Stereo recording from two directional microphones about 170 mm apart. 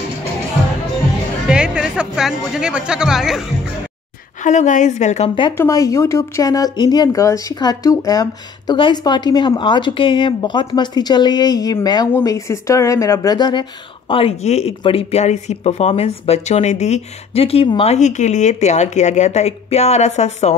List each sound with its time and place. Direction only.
1.5 s speech: 5° right (ahead or behind)
4.5 s a woman's voice: 45° left (ahead or behind)
5.6 s speech: 20° left (ahead or behind); by 20.5 s 40° left (ahead or behind)